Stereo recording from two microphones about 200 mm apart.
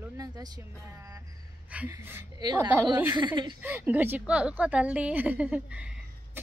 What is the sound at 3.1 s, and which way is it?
Speech, 20° right (ahead or behind).